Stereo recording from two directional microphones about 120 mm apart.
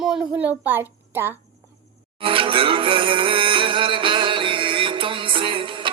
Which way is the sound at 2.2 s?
45° right (ahead or behind).